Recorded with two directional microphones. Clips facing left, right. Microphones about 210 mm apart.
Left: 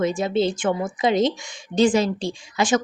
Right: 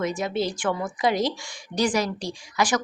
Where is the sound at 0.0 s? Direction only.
30° left (ahead or behind).